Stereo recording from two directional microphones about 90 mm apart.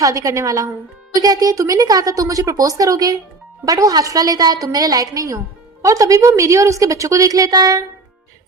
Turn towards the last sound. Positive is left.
turn(degrees=-45)  # may be behind; listen again after turning